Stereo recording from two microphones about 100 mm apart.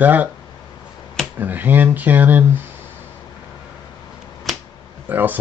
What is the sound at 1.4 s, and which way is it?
Speech, 20° right (ahead or behind).